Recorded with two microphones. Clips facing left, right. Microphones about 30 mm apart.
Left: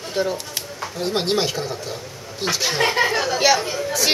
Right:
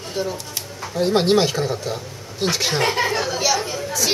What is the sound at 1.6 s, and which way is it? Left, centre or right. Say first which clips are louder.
Speech: right 4 dB; centre.